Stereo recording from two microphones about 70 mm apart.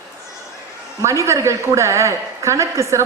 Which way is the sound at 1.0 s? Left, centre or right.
Right.